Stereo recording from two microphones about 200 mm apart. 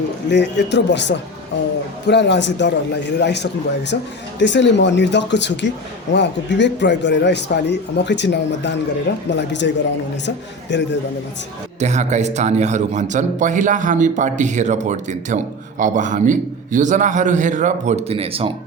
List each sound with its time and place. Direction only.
0.3 s a man's voice: 60° left (ahead or behind)
11.8 s a man's voice: 35° right (ahead or behind)